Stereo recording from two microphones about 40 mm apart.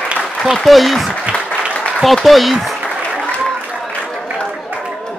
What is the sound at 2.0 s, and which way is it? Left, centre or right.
Speech, centre.